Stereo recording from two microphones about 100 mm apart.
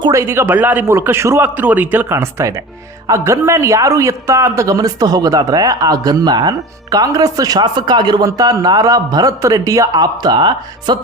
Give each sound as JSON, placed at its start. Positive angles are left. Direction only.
{"t": 0.1, "sound": "a man's voice", "side_deg": -25}
{"t": 8.3, "sound": "speech", "side_deg": -35}